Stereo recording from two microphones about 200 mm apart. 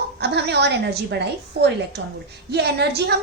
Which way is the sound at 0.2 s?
55° right (ahead or behind).